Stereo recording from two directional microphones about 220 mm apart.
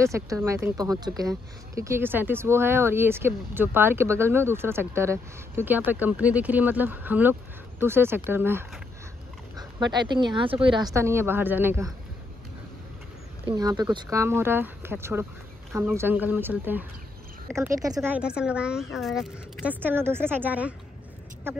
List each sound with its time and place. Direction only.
0.0 s speech: 15° right (ahead or behind)
9.6 s speech: 20° right (ahead or behind)
13.5 s speech: 20° right (ahead or behind)